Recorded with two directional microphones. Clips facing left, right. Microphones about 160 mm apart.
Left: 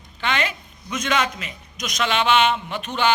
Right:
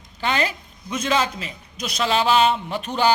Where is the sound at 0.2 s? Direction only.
35° right (ahead or behind).